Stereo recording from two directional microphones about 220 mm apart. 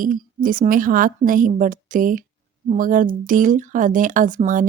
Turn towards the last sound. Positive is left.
turn(degrees=-35)  # may be behind; listen again after turning